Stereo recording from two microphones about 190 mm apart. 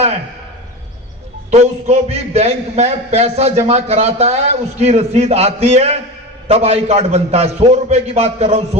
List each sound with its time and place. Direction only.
1.5 s a man's voice: 35° right (ahead or behind)